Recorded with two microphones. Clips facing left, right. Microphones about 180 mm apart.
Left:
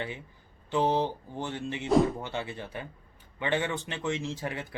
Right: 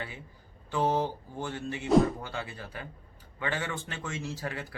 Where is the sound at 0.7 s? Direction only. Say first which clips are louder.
Left 2 dB; 20° left (ahead or behind).